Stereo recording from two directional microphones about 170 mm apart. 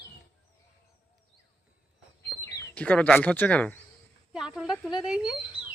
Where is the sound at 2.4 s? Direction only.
10° left (ahead or behind).